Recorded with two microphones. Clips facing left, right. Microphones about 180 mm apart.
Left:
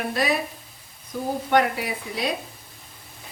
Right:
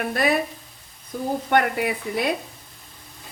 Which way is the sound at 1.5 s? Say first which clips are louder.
Even; 55° right (ahead or behind).